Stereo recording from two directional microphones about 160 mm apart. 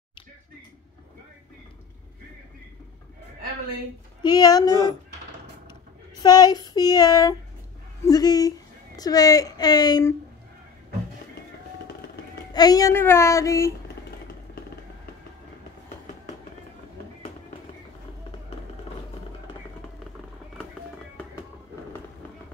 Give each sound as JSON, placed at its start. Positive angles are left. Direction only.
{"t": 4.2, "sound": "a woman's voice", "side_deg": 25}
{"t": 6.2, "sound": "a woman's voice", "side_deg": 25}
{"t": 12.5, "sound": "a woman's voice", "side_deg": 25}